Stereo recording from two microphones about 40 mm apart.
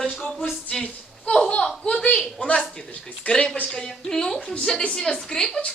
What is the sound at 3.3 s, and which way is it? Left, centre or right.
Speech, left.